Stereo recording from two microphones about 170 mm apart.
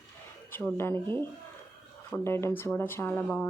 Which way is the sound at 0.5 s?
10° left (ahead or behind).